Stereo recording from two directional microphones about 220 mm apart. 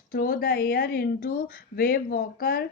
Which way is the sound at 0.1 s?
45° left (ahead or behind).